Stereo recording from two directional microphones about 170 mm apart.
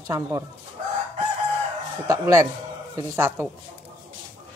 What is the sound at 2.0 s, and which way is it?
Speech, 20° right (ahead or behind).